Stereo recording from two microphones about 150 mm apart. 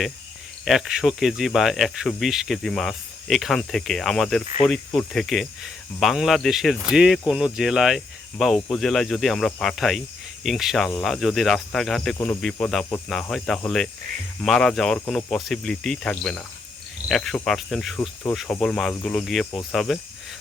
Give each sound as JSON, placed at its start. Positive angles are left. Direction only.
{"t": 0.6, "sound": "speech", "side_deg": 0}
{"t": 12.1, "sound": "speech", "side_deg": 15}
{"t": 12.4, "sound": "speech", "side_deg": 5}